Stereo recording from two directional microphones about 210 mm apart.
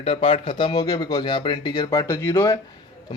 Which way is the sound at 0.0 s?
30° left (ahead or behind).